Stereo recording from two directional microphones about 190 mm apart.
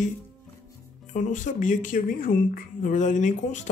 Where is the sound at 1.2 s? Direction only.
40° left (ahead or behind).